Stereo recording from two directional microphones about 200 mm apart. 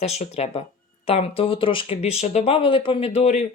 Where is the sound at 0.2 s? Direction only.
30° left (ahead or behind).